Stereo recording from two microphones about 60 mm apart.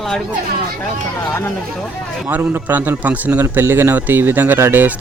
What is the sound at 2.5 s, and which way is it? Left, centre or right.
Speech, right.